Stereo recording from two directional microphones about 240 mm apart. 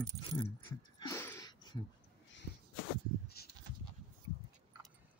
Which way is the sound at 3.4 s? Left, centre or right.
Left.